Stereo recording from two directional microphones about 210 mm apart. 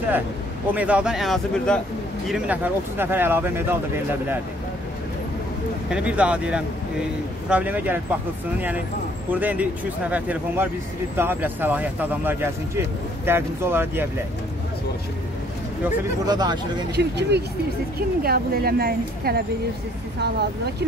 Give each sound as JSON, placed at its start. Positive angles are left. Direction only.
{"t": 0.7, "sound": "speech", "side_deg": -5}
{"t": 5.9, "sound": "speech", "side_deg": -5}
{"t": 16.3, "sound": "speech", "side_deg": -20}
{"t": 16.9, "sound": "a woman's voice", "side_deg": -55}